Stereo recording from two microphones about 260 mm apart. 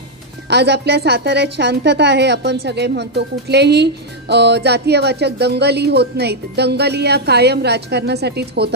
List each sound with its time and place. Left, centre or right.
0.5 s a woman's voice: right